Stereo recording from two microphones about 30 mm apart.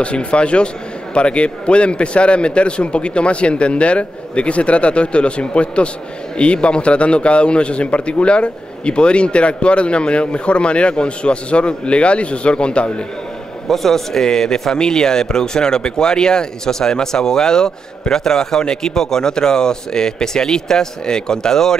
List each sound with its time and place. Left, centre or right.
0.0 s a man's voice: left
13.7 s a man's voice: centre